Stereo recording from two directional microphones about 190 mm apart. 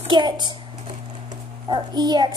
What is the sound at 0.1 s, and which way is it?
Speech, 25° right (ahead or behind).